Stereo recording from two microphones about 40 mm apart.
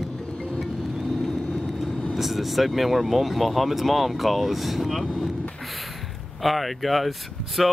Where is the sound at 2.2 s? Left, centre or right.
Centre.